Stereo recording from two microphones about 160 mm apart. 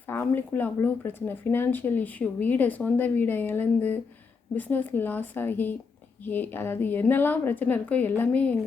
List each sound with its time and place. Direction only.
0.1 s speech: 15° left (ahead or behind)